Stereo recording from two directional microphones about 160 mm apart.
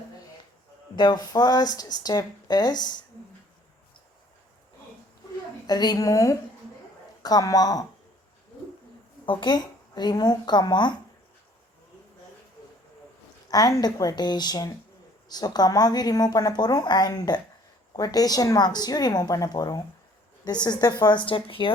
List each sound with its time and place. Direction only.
0.9 s a woman's voice: 30° left (ahead or behind)
5.6 s a woman's voice: 25° left (ahead or behind)
9.2 s a woman's voice: 30° left (ahead or behind)
13.5 s a woman's voice: 25° left (ahead or behind)